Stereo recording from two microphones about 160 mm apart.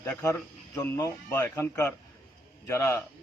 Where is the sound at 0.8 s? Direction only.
15° left (ahead or behind).